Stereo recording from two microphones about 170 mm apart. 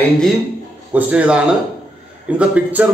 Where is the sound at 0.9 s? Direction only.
5° right (ahead or behind).